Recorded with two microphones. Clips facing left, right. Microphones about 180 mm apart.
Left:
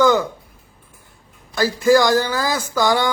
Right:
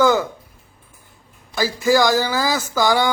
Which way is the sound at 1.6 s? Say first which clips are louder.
Left 2 dB; centre (ahead or behind).